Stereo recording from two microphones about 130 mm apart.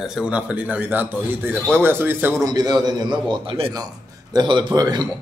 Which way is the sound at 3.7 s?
30° right (ahead or behind).